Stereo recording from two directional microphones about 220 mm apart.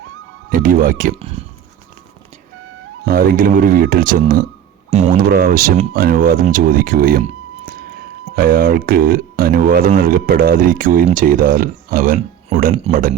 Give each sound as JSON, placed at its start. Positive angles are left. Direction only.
{"t": 0.5, "sound": "speech", "side_deg": -40}
{"t": 3.0, "sound": "speech", "side_deg": -40}
{"t": 4.9, "sound": "speech", "side_deg": -30}
{"t": 5.3, "sound": "speech", "side_deg": -40}
{"t": 8.4, "sound": "speech", "side_deg": -40}